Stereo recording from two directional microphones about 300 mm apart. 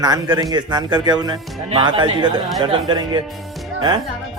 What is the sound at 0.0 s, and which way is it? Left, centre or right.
A man's voice, centre.